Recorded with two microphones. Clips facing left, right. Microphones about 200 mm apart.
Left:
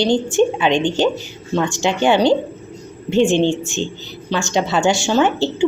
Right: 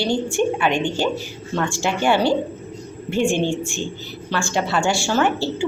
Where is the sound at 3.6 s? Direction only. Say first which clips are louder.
Left 3 dB; 10° right (ahead or behind).